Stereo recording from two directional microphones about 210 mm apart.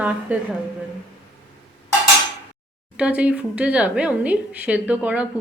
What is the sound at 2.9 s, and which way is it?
A woman's voice, 5° right (ahead or behind).